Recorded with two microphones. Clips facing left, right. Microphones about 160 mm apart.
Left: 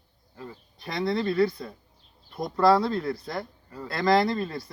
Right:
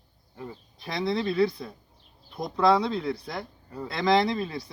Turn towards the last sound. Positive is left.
turn(degrees=0)  # may be behind; listen again after turning